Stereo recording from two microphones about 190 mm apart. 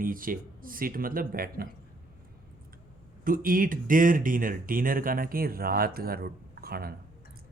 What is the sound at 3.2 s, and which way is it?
Speech, 45° right (ahead or behind).